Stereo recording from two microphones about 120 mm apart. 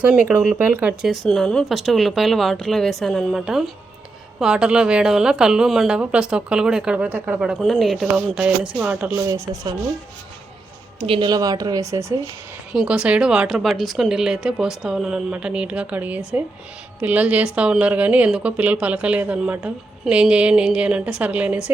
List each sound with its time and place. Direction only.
0.0 s a woman's voice: 10° right (ahead or behind)
1.1 s a woman's voice: 5° left (ahead or behind)
9.2 s speech: 30° right (ahead or behind)
11.0 s a man's voice: 50° right (ahead or behind)
11.3 s speech: 30° right (ahead or behind)
12.7 s a woman's voice: 5° right (ahead or behind)